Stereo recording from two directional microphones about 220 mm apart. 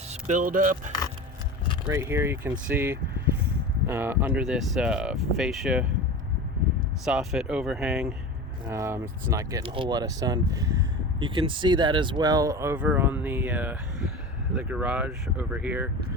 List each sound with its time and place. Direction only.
0.1 s speech: 35° right (ahead or behind)
1.9 s speech: 10° right (ahead or behind)
7.0 s speech: centre (ahead or behind)